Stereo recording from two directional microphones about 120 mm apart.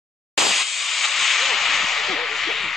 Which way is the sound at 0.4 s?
Centre (ahead or behind).